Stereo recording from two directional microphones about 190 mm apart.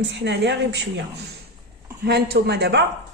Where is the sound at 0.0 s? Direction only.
65° right (ahead or behind).